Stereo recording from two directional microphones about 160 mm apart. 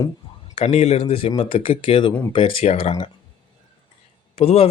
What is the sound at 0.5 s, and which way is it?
A man's voice, 40° left (ahead or behind).